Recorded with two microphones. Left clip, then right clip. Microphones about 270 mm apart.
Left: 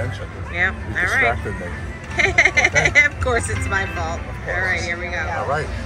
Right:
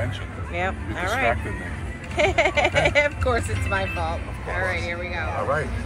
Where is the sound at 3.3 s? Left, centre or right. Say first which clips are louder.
Left 3 dB; centre.